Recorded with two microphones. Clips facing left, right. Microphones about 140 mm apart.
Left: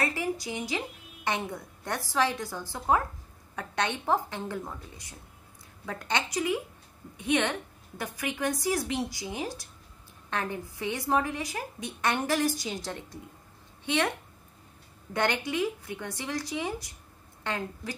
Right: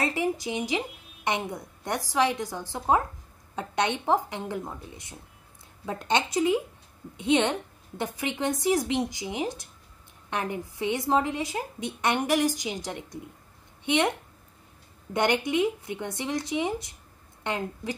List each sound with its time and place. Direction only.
0.0 s a woman's voice: 20° right (ahead or behind)
15.1 s a woman's voice: 20° right (ahead or behind)